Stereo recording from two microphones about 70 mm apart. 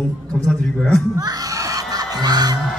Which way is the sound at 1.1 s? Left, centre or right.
Right.